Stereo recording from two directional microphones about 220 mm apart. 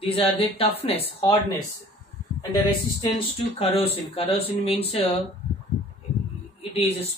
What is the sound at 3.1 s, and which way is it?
Speech, 25° left (ahead or behind).